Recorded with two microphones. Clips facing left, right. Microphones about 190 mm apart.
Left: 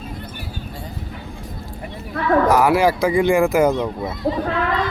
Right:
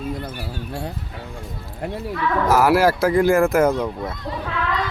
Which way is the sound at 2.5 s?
5° right (ahead or behind).